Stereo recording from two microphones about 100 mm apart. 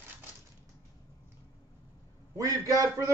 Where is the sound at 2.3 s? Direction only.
35° right (ahead or behind).